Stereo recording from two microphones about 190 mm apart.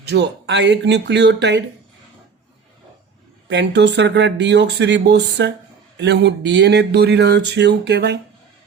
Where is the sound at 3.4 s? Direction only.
70° right (ahead or behind).